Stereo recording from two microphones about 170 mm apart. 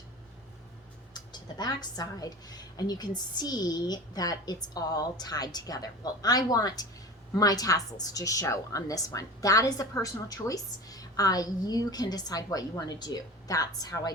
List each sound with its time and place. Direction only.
1.1 s a woman's voice: 25° left (ahead or behind)